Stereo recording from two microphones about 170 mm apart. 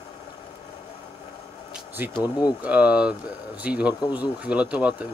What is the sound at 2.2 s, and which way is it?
Speech, 20° left (ahead or behind).